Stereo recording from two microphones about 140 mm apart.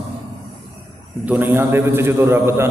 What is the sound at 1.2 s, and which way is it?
A man's voice, 15° right (ahead or behind).